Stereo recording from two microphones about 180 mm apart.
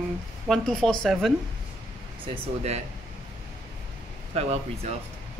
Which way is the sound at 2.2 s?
35° right (ahead or behind).